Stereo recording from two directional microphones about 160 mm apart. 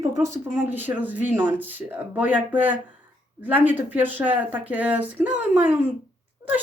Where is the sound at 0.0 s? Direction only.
15° right (ahead or behind).